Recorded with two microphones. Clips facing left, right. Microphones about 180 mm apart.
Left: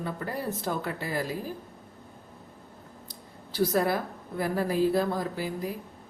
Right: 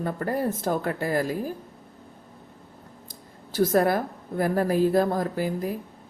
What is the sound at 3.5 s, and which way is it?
A woman's voice, 45° right (ahead or behind).